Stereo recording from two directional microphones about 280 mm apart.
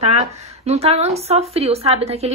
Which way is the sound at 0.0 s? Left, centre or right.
Right.